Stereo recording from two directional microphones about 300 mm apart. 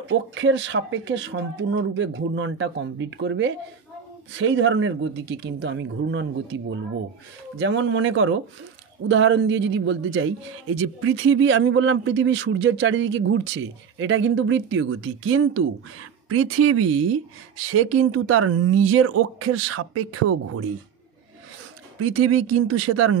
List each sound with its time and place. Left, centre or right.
0.0 s speech: right
22.0 s speech: right